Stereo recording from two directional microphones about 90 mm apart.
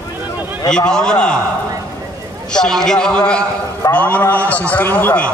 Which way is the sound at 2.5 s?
5° left (ahead or behind).